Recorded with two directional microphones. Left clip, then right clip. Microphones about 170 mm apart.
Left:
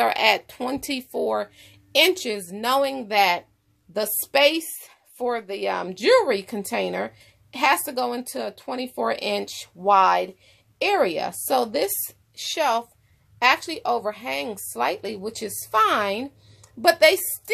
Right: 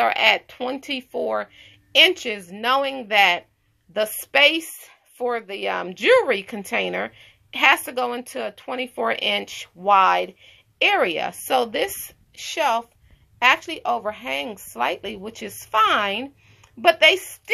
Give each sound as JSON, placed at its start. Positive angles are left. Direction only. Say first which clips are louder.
{"t": 0.0, "sound": "speech", "louder": "right 2 dB", "side_deg": 30}